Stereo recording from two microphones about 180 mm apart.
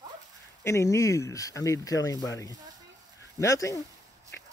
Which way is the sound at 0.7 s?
15° left (ahead or behind).